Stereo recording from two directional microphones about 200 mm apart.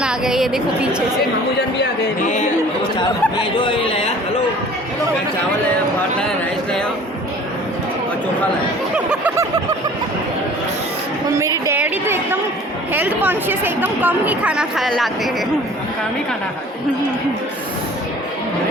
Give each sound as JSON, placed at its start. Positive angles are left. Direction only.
{"t": 0.0, "sound": "a woman's voice", "side_deg": -5}
{"t": 2.2, "sound": "speech", "side_deg": 35}
{"t": 3.3, "sound": "speech", "side_deg": 25}
{"t": 9.0, "sound": "a sound", "side_deg": -10}
{"t": 11.3, "sound": "a woman's voice", "side_deg": -15}